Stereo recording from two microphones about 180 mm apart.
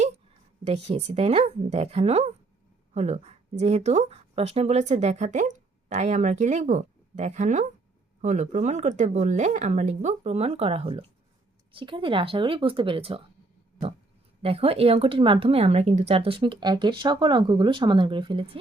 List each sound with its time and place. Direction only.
0.6 s speech: 35° right (ahead or behind)
14.4 s speech: 35° right (ahead or behind)